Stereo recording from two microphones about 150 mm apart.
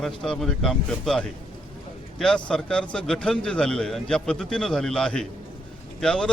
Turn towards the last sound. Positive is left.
turn(degrees=5)  # may be behind; listen again after turning